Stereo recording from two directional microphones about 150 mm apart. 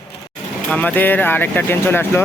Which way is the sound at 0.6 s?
10° left (ahead or behind).